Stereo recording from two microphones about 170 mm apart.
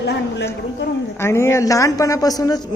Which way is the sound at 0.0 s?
90° left.